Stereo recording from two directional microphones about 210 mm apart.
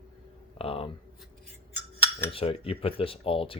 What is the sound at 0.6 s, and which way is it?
Speech, 25° left (ahead or behind).